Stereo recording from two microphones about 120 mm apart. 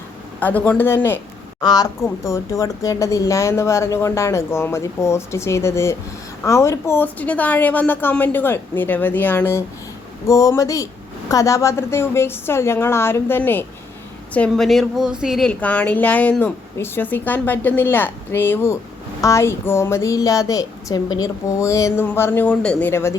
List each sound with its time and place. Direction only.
0.3 s a woman's voice: 15° left (ahead or behind)
1.6 s a woman's voice: 35° left (ahead or behind); by 13.7 s 15° left (ahead or behind)
14.3 s speech: 5° left (ahead or behind)
15.6 s a woman's voice: 10° left (ahead or behind)
22.9 s speech: 20° left (ahead or behind)